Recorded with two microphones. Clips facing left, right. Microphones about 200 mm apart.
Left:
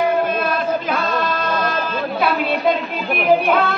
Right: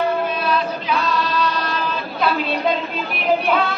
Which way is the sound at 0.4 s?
50° left (ahead or behind).